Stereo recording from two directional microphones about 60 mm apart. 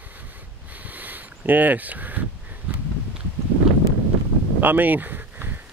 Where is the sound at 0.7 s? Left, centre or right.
Right.